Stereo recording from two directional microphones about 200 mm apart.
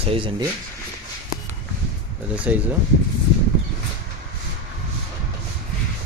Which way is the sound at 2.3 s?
5° right (ahead or behind).